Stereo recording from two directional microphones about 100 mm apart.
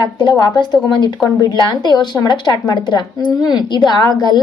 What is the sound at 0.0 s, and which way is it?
A woman's voice, 50° left (ahead or behind).